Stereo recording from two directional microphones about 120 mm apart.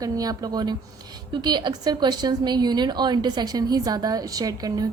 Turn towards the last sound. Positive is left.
turn(degrees=-30)  # may be behind; listen again after turning